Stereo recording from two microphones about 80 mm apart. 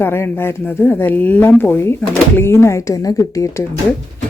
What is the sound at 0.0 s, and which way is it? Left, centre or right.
Speech, left.